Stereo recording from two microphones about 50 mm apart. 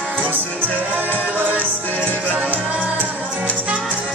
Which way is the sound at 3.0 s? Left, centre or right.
Right.